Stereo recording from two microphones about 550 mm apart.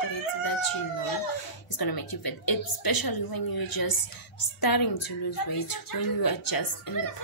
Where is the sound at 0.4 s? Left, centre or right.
Left.